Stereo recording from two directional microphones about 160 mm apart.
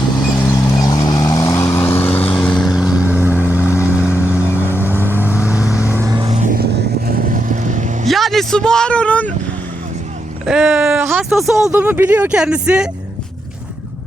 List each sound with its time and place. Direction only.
0.4 s vehicle: 20° left (ahead or behind); by 6.1 s 15° right (ahead or behind)
6.1 s vehicle: 35° right (ahead or behind)
6.4 s vehicle: 70° right (ahead or behind); by 7.9 s 50° right (ahead or behind)
8.0 s speech: centre (ahead or behind)
10.4 s a sound: 5° right (ahead or behind)
11.0 s speech: 10° right (ahead or behind)